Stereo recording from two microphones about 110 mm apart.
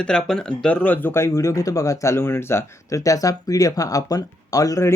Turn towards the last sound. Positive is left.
turn(degrees=30)  # may be behind; listen again after turning